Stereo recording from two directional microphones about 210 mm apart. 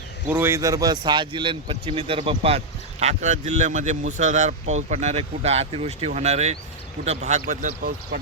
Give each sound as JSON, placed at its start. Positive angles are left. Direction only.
{"t": 0.3, "sound": "speech", "side_deg": -10}